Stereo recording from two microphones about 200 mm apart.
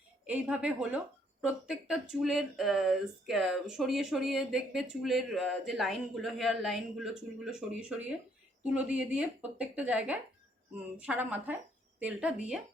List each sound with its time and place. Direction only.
0.3 s a woman's voice: 5° right (ahead or behind)